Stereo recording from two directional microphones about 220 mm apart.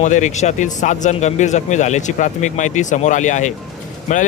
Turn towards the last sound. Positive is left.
turn(degrees=35)  # may be behind; listen again after turning